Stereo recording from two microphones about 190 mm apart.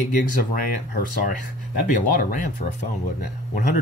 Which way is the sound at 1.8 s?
45° left (ahead or behind).